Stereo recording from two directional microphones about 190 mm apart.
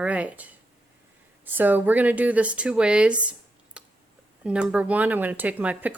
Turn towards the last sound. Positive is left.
turn(degrees=-5)  # may be behind; listen again after turning